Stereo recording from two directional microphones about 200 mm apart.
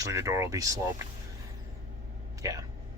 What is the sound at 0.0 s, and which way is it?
Speech, 15° right (ahead or behind).